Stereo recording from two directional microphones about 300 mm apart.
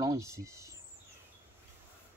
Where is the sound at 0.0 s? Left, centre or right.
Centre.